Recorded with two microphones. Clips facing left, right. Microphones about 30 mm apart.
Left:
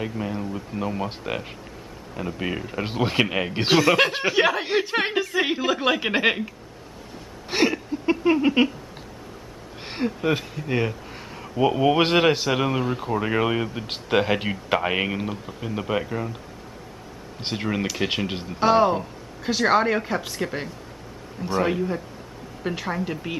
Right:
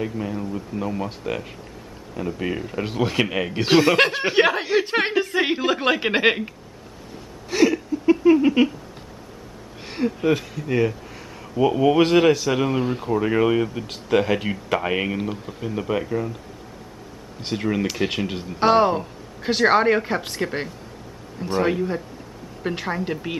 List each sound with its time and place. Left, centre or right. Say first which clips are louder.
0.0 s speech: right 1 dB; centre
2.8 s speech: even; centre
3.3 s speech: right 1 dB; centre
3.7 s speech: right 2 dB; centre
7.4 s a sound: right 3 dB; left
8.4 s speech: right 2 dB; centre
9.8 s speech: right 3 dB; centre
12.0 s speech: right 3 dB; left
12.4 s speech: right 2 dB; centre
17.6 s speech: right 3 dB; centre
18.6 s speech: right 1 dB; centre
22.8 s speech: right 2 dB; centre